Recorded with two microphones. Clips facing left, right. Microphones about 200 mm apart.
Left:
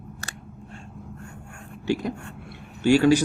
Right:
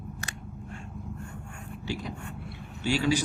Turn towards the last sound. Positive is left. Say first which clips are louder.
# left 9 dB
turn(degrees=45)  # may be behind; listen again after turning